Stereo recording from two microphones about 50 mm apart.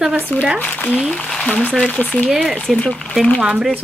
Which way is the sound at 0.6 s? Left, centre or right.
Left.